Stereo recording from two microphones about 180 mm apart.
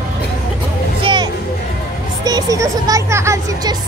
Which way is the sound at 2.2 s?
20° right (ahead or behind).